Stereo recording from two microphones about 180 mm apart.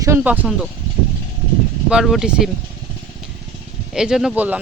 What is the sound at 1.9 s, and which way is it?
Speech, 5° right (ahead or behind).